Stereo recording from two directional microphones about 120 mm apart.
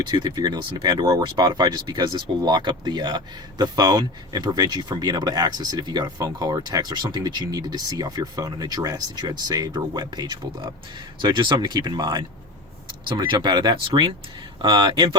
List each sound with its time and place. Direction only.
0.1 s speech: 35° right (ahead or behind)